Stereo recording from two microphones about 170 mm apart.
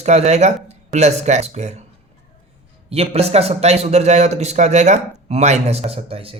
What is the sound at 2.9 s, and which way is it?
Speech, 35° right (ahead or behind).